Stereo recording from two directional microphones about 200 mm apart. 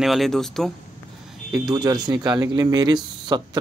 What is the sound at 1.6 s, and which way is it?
Speech, 20° right (ahead or behind).